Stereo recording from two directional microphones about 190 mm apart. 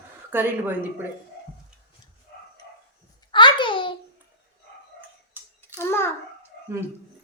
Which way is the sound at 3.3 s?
25° left (ahead or behind).